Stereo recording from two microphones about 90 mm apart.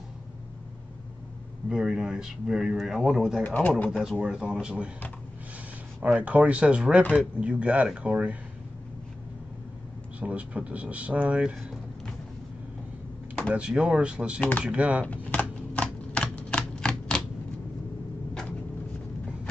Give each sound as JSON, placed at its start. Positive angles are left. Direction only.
{"t": 1.7, "sound": "a man's voice", "side_deg": -5}
{"t": 3.4, "sound": "speech", "side_deg": 20}
{"t": 4.0, "sound": "a man's voice", "side_deg": -10}
{"t": 6.0, "sound": "a man's voice", "side_deg": -15}
{"t": 10.2, "sound": "a man's voice", "side_deg": -15}
{"t": 13.5, "sound": "a man's voice", "side_deg": -10}
{"t": 15.0, "sound": "typewriter", "side_deg": 15}